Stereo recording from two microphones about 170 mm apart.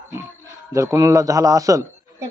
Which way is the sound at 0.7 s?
20° right (ahead or behind).